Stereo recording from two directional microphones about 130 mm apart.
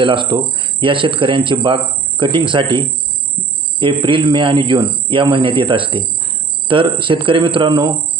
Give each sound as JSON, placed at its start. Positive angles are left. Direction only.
{"t": 0.0, "sound": "speech", "side_deg": -40}